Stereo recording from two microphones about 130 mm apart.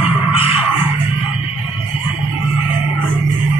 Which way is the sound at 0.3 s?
50° left (ahead or behind).